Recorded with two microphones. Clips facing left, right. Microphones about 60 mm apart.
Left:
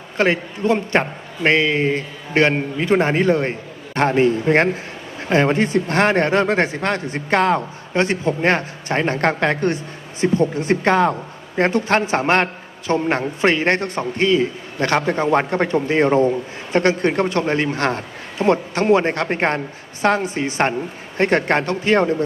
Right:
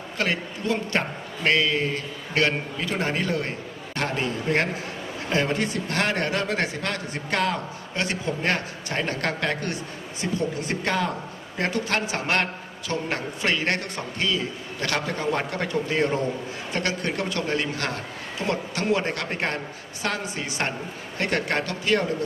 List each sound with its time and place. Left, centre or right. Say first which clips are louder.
0.2 s a man's voice: left 9 dB; left